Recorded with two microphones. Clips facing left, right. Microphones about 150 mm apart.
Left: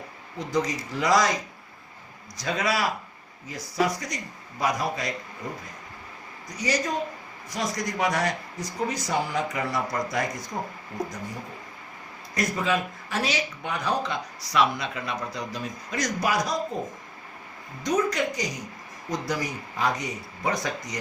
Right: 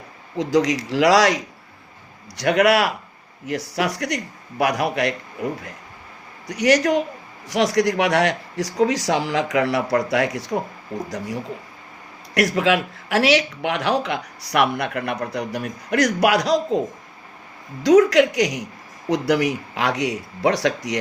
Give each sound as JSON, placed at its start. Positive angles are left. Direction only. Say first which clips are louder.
{"t": 0.3, "sound": "speech", "louder": "right 8 dB", "side_deg": -85}
{"t": 12.3, "sound": "speech", "louder": "right 7 dB", "side_deg": -85}
{"t": 17.8, "sound": "speech", "louder": "right 11 dB", "side_deg": -90}